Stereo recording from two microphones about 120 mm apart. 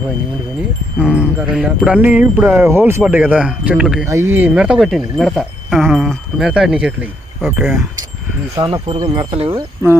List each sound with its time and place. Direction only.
1.0 s jingle bell: 10° right (ahead or behind)
4.0 s speech: 20° right (ahead or behind)
4.5 s speech: 5° right (ahead or behind)
6.5 s jingle bell: 5° right (ahead or behind)
8.9 s speech: 50° right (ahead or behind)
9.5 s speech: 20° right (ahead or behind)